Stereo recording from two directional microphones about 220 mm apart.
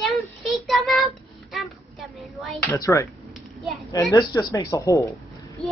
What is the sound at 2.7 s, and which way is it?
Speech, 15° left (ahead or behind).